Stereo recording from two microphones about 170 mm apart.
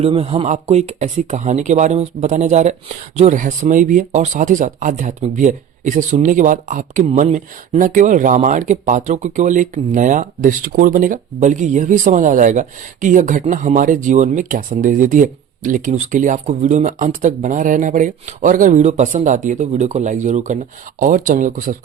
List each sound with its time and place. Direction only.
0.0 s speech: 35° right (ahead or behind); by 7.1 s 50° right (ahead or behind)
7.1 s speech: 35° right (ahead or behind)
7.3 s speech: 50° right (ahead or behind)